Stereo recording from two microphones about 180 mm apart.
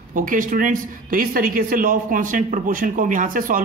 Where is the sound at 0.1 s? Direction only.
50° right (ahead or behind).